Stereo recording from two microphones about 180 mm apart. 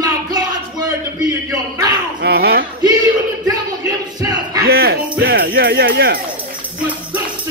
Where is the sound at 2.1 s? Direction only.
60° right (ahead or behind).